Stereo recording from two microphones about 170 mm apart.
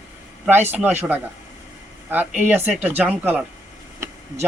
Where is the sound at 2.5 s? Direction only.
10° right (ahead or behind).